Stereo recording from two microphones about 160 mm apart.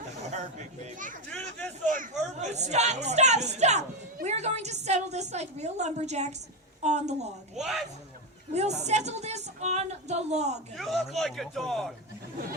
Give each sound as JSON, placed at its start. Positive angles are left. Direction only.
{"t": 0.3, "sound": "chatter", "side_deg": -50}
{"t": 1.3, "sound": "a sound", "side_deg": 10}
{"t": 1.9, "sound": "a woman's voice", "side_deg": -50}
{"t": 7.6, "sound": "a man's voice", "side_deg": 0}
{"t": 8.5, "sound": "a woman's voice", "side_deg": -45}
{"t": 10.8, "sound": "a man's voice", "side_deg": 0}